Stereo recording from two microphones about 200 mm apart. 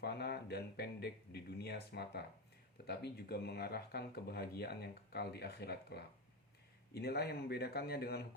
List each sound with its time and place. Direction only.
0.0 s speech: 55° left (ahead or behind)